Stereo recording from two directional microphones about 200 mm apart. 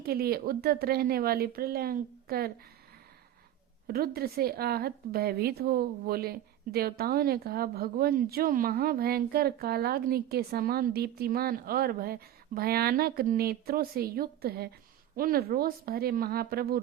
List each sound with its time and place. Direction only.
0.0 s a woman's voice: 50° right (ahead or behind)
3.8 s a woman's voice: 50° right (ahead or behind)